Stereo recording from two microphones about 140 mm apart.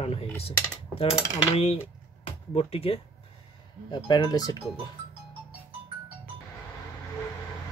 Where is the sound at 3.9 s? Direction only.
35° left (ahead or behind).